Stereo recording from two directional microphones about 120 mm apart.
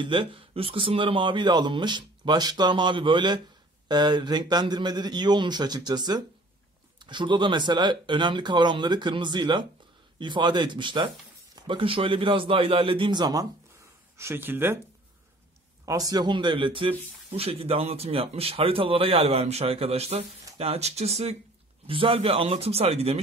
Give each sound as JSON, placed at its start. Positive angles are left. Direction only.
{"t": 0.0, "sound": "speech", "side_deg": -45}
{"t": 14.1, "sound": "speech", "side_deg": -20}
{"t": 15.8, "sound": "speech", "side_deg": -30}
{"t": 21.8, "sound": "speech", "side_deg": -50}